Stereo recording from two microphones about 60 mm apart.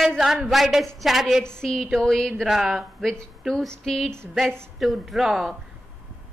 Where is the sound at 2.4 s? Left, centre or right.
Centre.